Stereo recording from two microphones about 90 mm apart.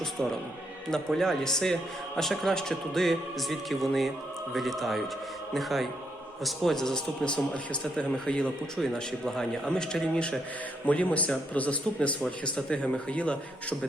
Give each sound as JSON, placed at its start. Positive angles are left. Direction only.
{"t": 0.0, "sound": "music", "side_deg": 5}
{"t": 0.9, "sound": "a man's voice", "side_deg": 5}